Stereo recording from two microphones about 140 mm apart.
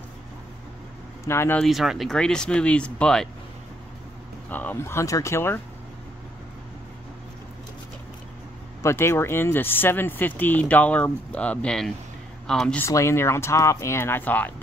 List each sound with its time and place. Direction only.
1.2 s speech: 20° left (ahead or behind)
1.6 s speech: centre (ahead or behind)
4.5 s speech: 10° left (ahead or behind)
8.8 s speech: 20° left (ahead or behind)
12.8 s speech: 20° left (ahead or behind)